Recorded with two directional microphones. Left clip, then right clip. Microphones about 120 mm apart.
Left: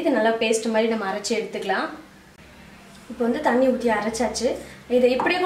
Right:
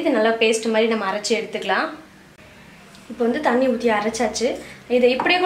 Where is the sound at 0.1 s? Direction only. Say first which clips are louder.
Right 3 dB; 15° right (ahead or behind).